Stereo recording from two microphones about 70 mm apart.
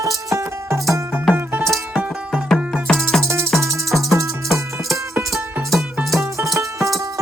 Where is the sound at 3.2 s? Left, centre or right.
Right.